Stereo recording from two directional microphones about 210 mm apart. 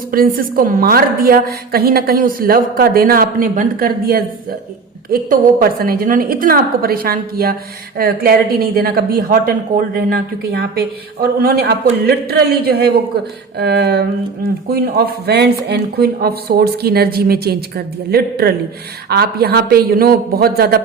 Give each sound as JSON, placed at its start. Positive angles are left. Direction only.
{"t": 0.1, "sound": "a woman's voice", "side_deg": -45}